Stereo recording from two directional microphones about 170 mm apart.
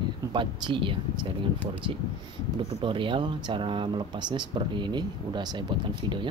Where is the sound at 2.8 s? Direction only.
30° right (ahead or behind).